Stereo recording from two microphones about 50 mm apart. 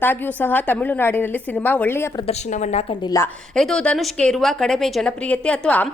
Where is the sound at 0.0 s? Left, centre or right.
Left.